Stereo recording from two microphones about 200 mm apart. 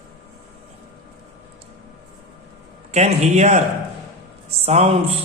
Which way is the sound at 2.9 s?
35° right (ahead or behind).